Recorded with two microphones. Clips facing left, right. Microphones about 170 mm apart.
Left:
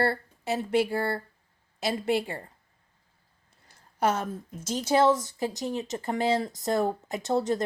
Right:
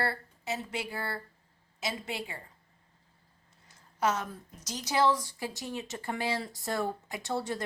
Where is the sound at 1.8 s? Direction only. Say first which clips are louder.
Left 10 dB; 65° left (ahead or behind).